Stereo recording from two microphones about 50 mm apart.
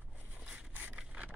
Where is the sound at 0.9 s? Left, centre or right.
Right.